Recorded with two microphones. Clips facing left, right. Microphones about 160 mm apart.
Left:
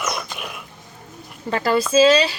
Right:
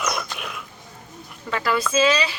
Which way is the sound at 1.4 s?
35° left (ahead or behind).